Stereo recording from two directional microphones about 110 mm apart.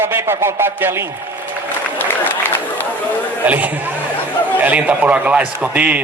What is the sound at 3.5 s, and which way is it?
A man's voice, 15° right (ahead or behind).